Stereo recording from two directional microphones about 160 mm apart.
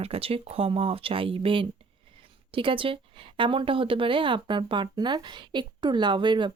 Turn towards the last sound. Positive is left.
turn(degrees=-30)  # may be behind; listen again after turning